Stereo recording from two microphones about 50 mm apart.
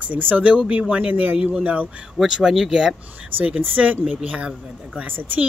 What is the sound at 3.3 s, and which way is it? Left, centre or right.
Speech, right.